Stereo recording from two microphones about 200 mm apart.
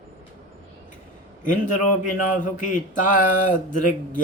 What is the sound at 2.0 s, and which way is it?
Speech, 40° left (ahead or behind).